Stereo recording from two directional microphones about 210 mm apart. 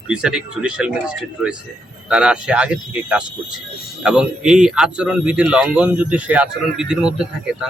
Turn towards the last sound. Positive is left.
turn(degrees=-5)  # may be behind; listen again after turning